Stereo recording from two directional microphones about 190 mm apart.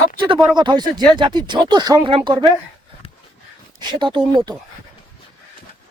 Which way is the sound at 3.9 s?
25° right (ahead or behind).